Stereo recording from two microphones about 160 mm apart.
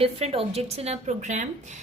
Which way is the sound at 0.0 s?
40° right (ahead or behind).